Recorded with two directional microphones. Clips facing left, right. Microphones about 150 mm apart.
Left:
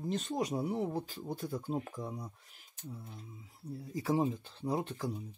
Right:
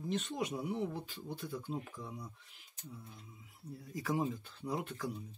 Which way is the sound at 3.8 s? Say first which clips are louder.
Left 4 dB; 30° left (ahead or behind).